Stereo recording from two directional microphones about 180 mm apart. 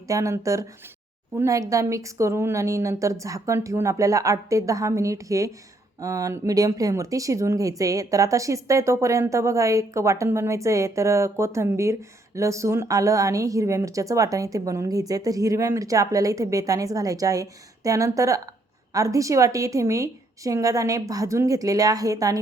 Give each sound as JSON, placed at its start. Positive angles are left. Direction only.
{"t": 0.1, "sound": "a woman's voice", "side_deg": -15}